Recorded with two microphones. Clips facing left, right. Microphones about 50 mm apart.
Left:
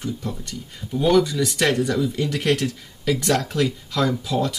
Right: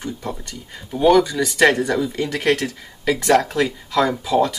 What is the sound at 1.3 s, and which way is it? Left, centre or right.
Speech, centre.